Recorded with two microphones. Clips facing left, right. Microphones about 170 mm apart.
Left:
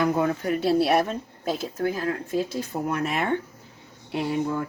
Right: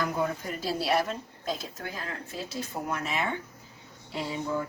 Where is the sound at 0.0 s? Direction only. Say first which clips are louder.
Left 7 dB; 65° left (ahead or behind).